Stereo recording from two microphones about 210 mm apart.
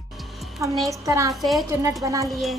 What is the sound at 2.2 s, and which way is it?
Speech, centre (ahead or behind).